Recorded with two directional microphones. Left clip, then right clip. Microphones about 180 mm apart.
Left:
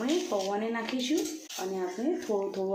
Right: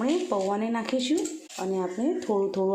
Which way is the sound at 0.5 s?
50° right (ahead or behind).